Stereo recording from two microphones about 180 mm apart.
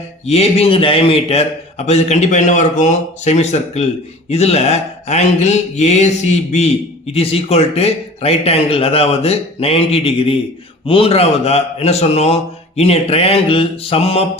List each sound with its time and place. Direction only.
0.3 s speech: 35° left (ahead or behind)